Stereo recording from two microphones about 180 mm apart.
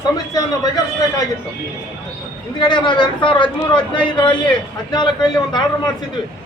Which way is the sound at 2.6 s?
25° left (ahead or behind).